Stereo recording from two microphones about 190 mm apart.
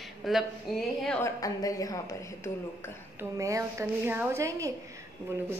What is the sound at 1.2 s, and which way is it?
Speech, 15° left (ahead or behind).